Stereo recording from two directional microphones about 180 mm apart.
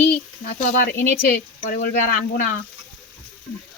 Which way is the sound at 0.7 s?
60° left (ahead or behind).